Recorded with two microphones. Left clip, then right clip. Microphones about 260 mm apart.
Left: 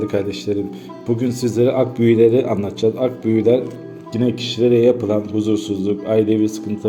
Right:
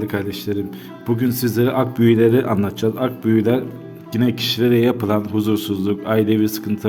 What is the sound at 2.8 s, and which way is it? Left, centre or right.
Speech, right.